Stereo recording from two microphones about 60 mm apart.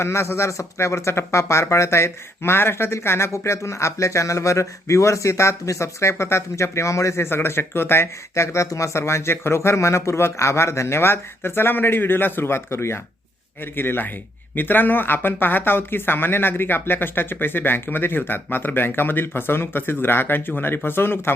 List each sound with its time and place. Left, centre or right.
0.0 s speech: left
13.7 s speech: left